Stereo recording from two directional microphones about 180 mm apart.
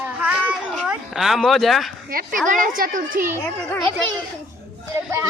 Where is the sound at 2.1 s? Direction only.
50° right (ahead or behind).